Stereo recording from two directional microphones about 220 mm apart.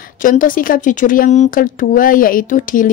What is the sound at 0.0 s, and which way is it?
Speech, 40° left (ahead or behind).